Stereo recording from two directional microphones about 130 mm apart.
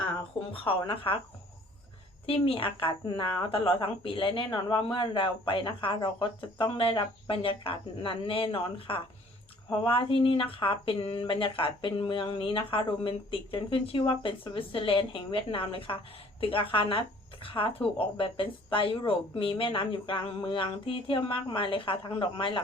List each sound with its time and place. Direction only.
0.5 s speech: 45° left (ahead or behind)
2.2 s speech: 45° left (ahead or behind)